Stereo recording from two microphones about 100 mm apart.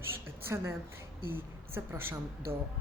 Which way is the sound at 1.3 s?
25° right (ahead or behind).